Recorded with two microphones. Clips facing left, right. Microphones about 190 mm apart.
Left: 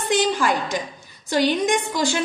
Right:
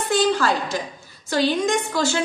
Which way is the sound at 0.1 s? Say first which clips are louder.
Right 1 dB; 15° left (ahead or behind).